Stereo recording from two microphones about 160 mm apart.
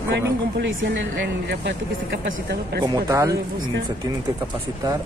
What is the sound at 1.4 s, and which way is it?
Speech, 90° right.